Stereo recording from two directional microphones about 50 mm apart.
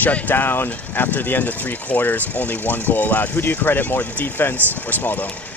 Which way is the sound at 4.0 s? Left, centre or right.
Left.